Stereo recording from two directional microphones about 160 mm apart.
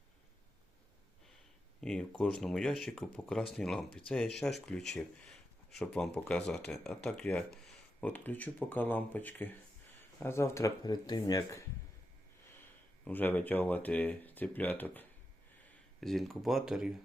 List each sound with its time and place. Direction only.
1.8 s speech: 5° left (ahead or behind); by 11.6 s 25° left (ahead or behind)
13.1 s speech: 10° left (ahead or behind)